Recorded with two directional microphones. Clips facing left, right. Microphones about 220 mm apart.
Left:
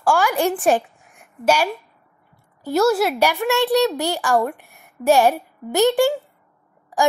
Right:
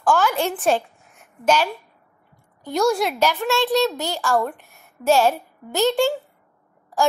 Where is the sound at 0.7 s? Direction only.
15° left (ahead or behind).